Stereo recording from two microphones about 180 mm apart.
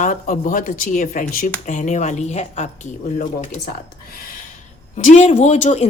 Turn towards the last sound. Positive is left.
turn(degrees=40)  # may be behind; listen again after turning